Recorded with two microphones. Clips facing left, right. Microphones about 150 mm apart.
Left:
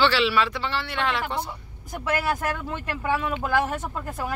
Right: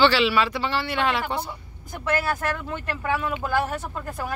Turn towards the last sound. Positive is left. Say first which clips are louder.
# left 1 dB
turn(degrees=10)  # may be behind; listen again after turning